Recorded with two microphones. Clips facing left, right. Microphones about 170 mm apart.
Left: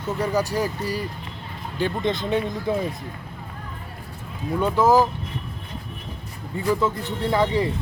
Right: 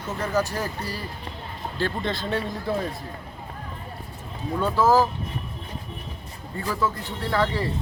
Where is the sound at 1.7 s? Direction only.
15° left (ahead or behind).